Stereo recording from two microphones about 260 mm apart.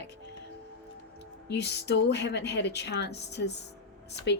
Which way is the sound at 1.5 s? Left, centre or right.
Left.